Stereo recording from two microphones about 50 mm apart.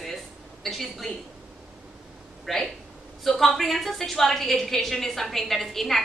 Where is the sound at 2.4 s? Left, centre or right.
Centre.